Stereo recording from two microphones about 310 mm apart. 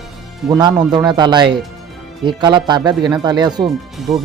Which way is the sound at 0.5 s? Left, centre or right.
Centre.